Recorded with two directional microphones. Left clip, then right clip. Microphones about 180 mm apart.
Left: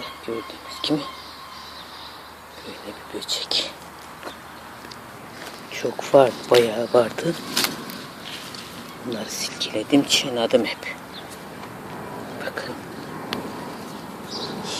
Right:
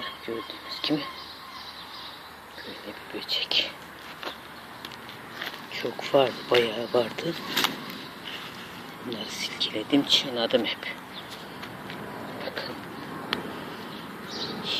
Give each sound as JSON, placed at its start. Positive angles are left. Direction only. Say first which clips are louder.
{"t": 0.7, "sound": "speech", "louder": "left 4 dB", "side_deg": 5}
{"t": 3.3, "sound": "speech", "louder": "left 1 dB", "side_deg": 0}
{"t": 5.7, "sound": "speech", "louder": "left 7 dB", "side_deg": 20}
{"t": 9.0, "sound": "speech", "louder": "left 4 dB", "side_deg": 20}
{"t": 12.4, "sound": "a sound", "louder": "left 4 dB", "side_deg": 10}